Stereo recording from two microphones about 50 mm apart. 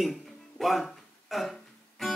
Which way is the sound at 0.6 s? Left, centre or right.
Centre.